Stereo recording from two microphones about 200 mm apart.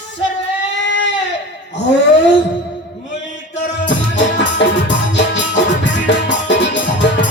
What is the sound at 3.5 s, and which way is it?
Music, 65° left (ahead or behind).